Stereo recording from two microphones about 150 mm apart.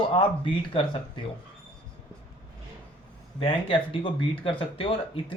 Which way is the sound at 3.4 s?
35° left (ahead or behind).